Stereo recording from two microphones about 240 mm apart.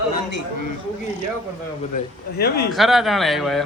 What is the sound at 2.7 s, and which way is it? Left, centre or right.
Speech, centre.